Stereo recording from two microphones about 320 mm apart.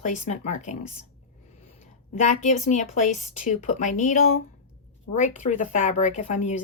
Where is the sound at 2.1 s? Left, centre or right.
Left.